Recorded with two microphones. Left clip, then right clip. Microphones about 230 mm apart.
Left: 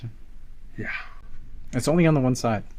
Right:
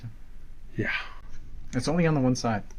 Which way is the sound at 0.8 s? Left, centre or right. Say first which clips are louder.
Right 3 dB; right.